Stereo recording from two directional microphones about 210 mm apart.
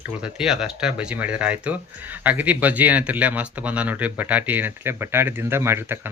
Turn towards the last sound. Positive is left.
turn(degrees=-10)  # may be behind; listen again after turning